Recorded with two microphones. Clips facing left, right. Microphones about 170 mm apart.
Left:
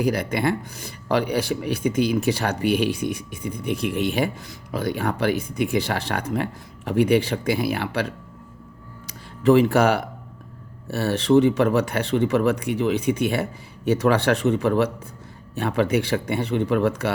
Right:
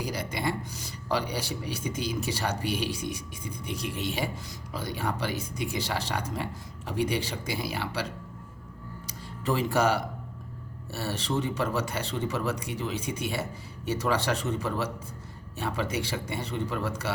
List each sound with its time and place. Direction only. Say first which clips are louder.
0.0 s speech: left 9 dB; 60° left (ahead or behind)
9.5 s speech: left 9 dB; 65° left (ahead or behind)